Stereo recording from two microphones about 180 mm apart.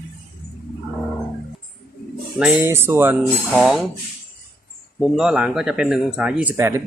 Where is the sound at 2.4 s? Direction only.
10° right (ahead or behind).